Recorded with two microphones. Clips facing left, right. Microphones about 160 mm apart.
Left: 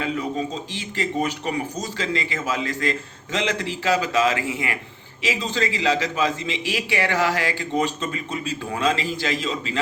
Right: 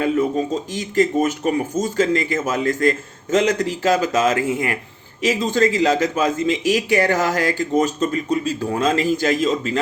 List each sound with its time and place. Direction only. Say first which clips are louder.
0.0 s a man's voice: right 7 dB; 45° right (ahead or behind)